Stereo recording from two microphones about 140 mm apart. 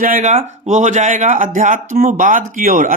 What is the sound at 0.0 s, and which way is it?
Speech, 70° right (ahead or behind).